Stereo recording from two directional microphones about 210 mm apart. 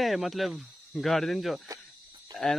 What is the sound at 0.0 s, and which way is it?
A man's voice, centre (ahead or behind).